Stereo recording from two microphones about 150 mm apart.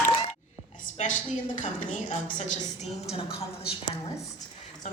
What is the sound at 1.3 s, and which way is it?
A woman's voice, 55° left (ahead or behind).